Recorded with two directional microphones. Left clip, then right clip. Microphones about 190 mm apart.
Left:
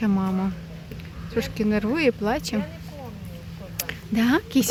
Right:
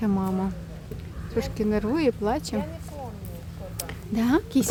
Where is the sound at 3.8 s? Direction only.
Centre (ahead or behind).